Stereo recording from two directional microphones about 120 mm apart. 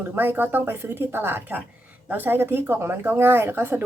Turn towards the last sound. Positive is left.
turn(degrees=-20)  # may be behind; listen again after turning